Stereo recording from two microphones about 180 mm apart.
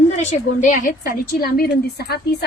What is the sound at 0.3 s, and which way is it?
A woman's voice, 45° left (ahead or behind).